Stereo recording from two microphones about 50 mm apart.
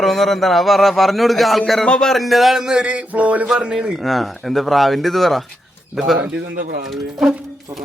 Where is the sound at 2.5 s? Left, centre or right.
Centre.